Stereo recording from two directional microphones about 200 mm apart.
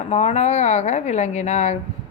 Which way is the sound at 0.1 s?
35° left (ahead or behind).